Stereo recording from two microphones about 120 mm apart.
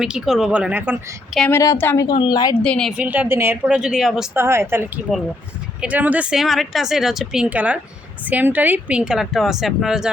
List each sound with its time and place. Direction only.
0.0 s speech: 5° right (ahead or behind)
1.5 s a woman's voice: 25° left (ahead or behind)
2.0 s a woman's voice: 40° left (ahead or behind)
2.6 s a woman's voice: 5° left (ahead or behind)
3.0 s speech: 15° right (ahead or behind)
4.4 s speech: 20° right (ahead or behind); by 10.1 s 5° right (ahead or behind)